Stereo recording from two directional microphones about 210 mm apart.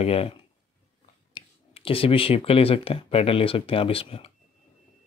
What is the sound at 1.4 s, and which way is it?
Speech, 25° left (ahead or behind).